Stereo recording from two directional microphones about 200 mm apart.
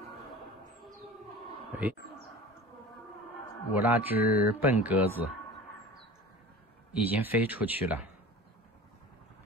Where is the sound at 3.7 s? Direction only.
10° right (ahead or behind).